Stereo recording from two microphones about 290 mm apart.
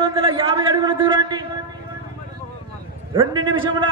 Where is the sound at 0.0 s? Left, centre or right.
Centre.